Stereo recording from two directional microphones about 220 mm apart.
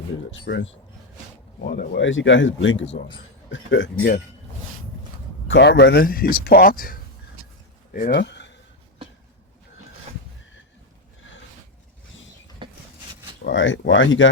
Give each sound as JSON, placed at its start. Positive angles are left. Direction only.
{"t": 0.3, "sound": "speech", "side_deg": 55}
{"t": 1.6, "sound": "speech", "side_deg": 45}
{"t": 5.5, "sound": "speech", "side_deg": 50}
{"t": 13.4, "sound": "speech", "side_deg": 55}